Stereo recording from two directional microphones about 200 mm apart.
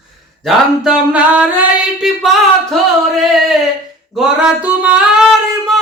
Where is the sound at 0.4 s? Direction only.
5° right (ahead or behind).